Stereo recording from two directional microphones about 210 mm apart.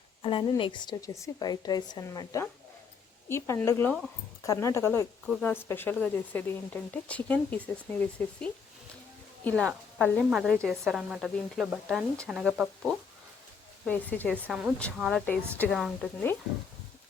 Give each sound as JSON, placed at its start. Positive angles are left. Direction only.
{"t": 0.2, "sound": "speech", "side_deg": 25}
{"t": 5.2, "sound": "a woman's voice", "side_deg": 5}
{"t": 14.3, "sound": "a woman's voice", "side_deg": -5}